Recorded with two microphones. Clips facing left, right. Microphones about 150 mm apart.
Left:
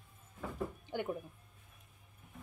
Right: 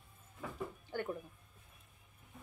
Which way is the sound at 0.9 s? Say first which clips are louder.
Left 1 dB; 15° left (ahead or behind).